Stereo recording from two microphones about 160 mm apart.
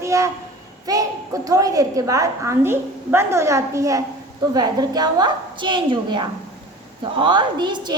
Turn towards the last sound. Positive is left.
turn(degrees=-30)  # may be behind; listen again after turning